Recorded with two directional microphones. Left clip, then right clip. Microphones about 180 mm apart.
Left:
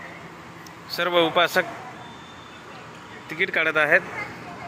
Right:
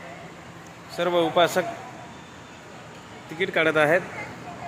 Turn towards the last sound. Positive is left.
turn(degrees=-15)  # may be behind; listen again after turning